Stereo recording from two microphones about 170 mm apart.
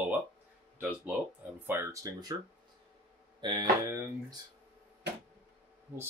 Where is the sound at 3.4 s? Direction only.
25° right (ahead or behind).